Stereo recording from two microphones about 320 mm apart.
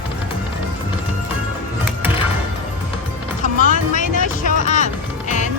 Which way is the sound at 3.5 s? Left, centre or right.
Left.